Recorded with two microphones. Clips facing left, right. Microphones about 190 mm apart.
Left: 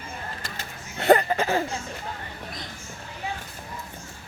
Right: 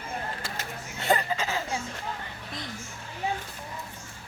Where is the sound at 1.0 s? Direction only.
60° left (ahead or behind).